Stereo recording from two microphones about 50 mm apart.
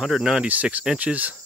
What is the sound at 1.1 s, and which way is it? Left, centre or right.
Cricket, centre.